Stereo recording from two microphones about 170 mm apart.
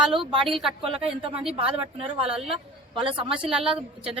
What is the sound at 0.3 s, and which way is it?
Speech, 30° right (ahead or behind).